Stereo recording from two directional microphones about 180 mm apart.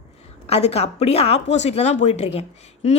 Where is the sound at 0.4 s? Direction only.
35° left (ahead or behind).